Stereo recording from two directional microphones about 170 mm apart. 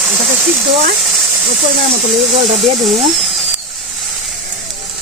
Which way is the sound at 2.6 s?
Centre (ahead or behind).